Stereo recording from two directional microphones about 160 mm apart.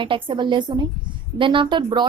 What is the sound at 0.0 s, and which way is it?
A woman's voice, 30° right (ahead or behind).